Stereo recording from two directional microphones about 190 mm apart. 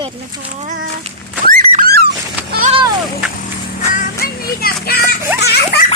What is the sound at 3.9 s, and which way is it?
Music, 50° left (ahead or behind).